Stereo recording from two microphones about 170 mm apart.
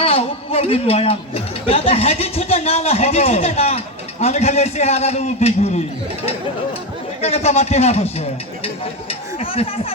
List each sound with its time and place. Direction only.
0.0 s a man's voice: 35° left (ahead or behind)
7.2 s a man's voice: 40° left (ahead or behind)